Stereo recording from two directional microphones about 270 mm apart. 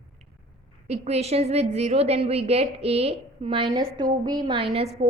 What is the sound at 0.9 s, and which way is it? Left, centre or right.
A woman's voice, right.